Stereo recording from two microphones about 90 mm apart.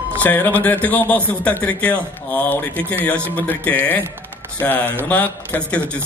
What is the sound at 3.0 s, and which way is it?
Speech, 25° right (ahead or behind).